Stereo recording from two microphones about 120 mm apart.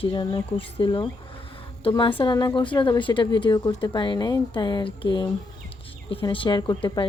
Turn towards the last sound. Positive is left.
turn(degrees=40)  # may be behind; listen again after turning